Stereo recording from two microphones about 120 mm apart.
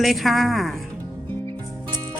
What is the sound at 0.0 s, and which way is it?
Speech, centre (ahead or behind).